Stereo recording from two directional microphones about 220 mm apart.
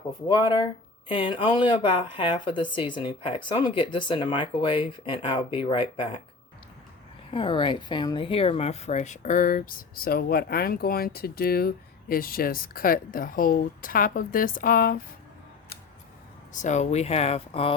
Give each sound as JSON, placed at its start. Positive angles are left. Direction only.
{"t": 0.3, "sound": "speech", "side_deg": 20}
{"t": 7.3, "sound": "speech", "side_deg": 20}
{"t": 16.5, "sound": "speech", "side_deg": 35}